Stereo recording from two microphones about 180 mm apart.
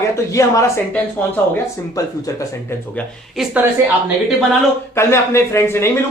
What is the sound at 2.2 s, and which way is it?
Speech, 20° left (ahead or behind).